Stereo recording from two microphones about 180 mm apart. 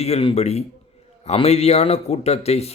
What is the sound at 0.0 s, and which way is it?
Speech, 35° left (ahead or behind).